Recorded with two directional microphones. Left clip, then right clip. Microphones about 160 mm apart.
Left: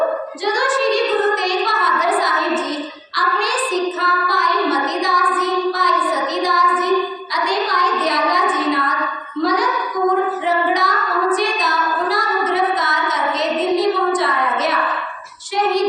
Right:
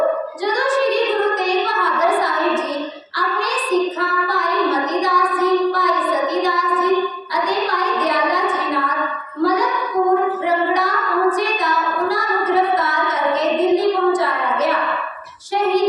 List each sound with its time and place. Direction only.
0.4 s child singing: 25° right (ahead or behind)
7.3 s a sound: 25° right (ahead or behind)
9.4 s child singing: 25° right (ahead or behind)